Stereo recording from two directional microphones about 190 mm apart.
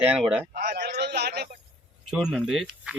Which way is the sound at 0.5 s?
60° right (ahead or behind).